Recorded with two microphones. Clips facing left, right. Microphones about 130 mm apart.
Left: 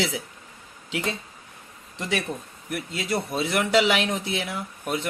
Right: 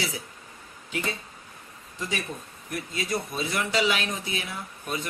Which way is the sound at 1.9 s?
80° left.